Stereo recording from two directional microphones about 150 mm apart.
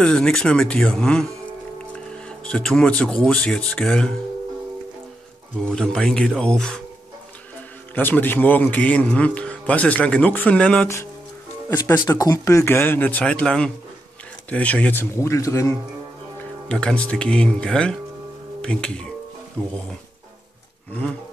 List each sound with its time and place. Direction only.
0.0 s speech: 5° left (ahead or behind)
2.2 s speech: 5° left (ahead or behind)
5.6 s speech: 5° left (ahead or behind)
7.9 s a man's voice: 10° left (ahead or behind)
11.7 s a man's voice: 25° left (ahead or behind)
16.6 s a man's voice: 5° left (ahead or behind)
20.9 s a man's voice: 5° left (ahead or behind)